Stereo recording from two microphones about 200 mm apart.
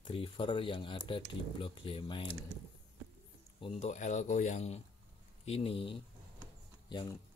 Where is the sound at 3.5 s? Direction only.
30° left (ahead or behind).